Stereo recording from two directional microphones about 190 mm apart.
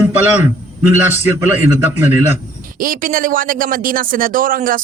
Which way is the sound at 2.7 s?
45° right (ahead or behind).